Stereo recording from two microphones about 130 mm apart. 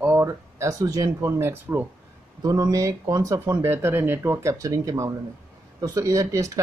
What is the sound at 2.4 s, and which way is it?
Speech, 30° right (ahead or behind).